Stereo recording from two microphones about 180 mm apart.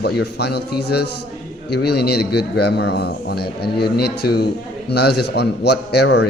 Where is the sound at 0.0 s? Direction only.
65° left (ahead or behind).